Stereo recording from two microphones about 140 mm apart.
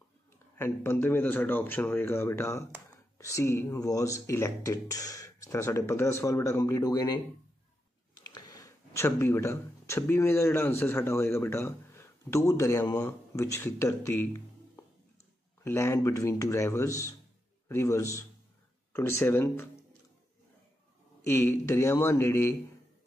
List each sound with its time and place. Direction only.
0.6 s speech: 15° left (ahead or behind)
8.2 s speech: 30° left (ahead or behind)
15.6 s speech: 20° left (ahead or behind)
21.2 s speech: 15° left (ahead or behind)